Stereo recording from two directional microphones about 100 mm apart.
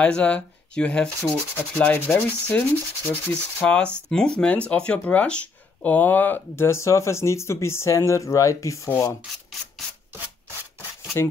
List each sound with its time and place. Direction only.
0.0 s sanding: 15° left (ahead or behind)
4.6 s speech: 10° left (ahead or behind); by 8.9 s 30° left (ahead or behind)